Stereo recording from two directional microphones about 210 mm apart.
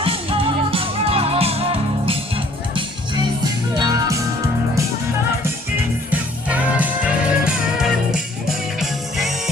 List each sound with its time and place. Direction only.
0.0 s music: 25° right (ahead or behind)
6.1 s music: 5° right (ahead or behind)